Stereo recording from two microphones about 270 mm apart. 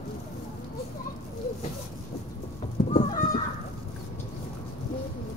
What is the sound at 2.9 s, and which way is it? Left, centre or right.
Goose, left.